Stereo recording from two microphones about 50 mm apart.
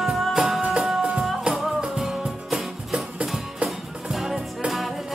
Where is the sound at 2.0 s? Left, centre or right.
Centre.